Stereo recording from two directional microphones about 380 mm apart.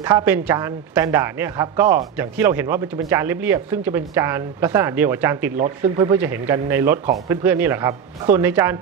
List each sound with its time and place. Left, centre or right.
0.0 s a woman's voice: centre